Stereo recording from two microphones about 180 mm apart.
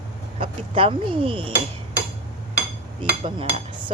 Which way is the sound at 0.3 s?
30° right (ahead or behind).